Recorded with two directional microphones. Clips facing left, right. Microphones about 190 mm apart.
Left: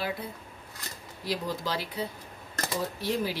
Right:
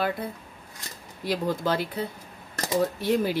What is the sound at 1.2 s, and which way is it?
Speech, 55° right (ahead or behind).